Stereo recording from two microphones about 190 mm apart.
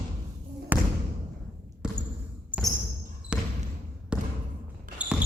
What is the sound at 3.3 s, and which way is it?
Basketball bounce, 5° right (ahead or behind).